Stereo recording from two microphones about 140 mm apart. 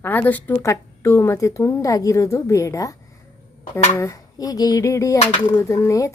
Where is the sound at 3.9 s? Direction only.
20° left (ahead or behind).